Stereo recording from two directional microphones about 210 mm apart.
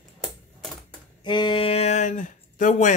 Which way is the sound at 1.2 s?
20° left (ahead or behind).